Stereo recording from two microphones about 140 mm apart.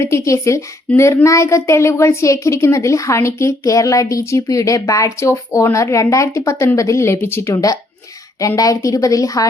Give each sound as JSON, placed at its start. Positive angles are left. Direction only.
{"t": 0.0, "sound": "a woman's voice", "side_deg": 20}